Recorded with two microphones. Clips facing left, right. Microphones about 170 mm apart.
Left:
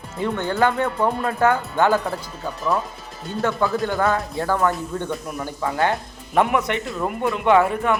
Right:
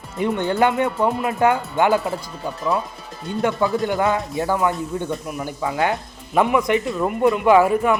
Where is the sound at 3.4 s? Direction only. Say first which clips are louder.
Right 1 dB; 20° right (ahead or behind).